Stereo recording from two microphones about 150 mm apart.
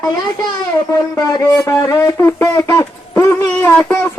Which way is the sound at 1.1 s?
20° left (ahead or behind).